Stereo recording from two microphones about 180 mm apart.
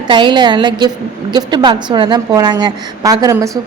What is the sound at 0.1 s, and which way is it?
A woman's voice, 25° right (ahead or behind).